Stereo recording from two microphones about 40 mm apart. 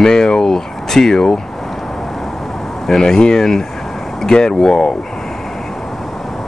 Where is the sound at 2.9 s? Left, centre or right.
Centre.